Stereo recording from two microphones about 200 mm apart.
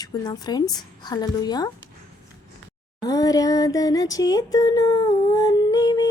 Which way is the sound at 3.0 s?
15° left (ahead or behind).